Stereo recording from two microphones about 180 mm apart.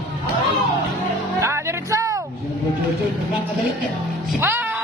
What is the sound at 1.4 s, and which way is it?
Music, 15° right (ahead or behind).